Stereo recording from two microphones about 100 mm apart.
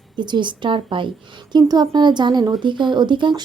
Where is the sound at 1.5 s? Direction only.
45° right (ahead or behind).